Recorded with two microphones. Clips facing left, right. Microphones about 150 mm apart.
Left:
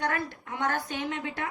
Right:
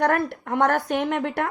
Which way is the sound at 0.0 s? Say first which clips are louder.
Right 9 dB; 60° right (ahead or behind).